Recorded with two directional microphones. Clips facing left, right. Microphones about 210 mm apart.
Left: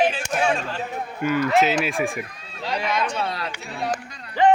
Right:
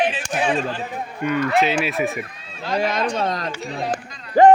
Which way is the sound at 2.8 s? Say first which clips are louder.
Right 3 dB; 50° right (ahead or behind).